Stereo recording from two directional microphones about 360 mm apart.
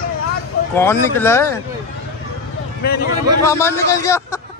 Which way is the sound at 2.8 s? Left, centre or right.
Left.